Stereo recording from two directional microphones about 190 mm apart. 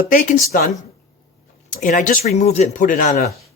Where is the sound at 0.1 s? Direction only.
45° left (ahead or behind).